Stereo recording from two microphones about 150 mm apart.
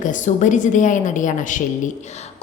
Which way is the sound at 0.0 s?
60° left (ahead or behind).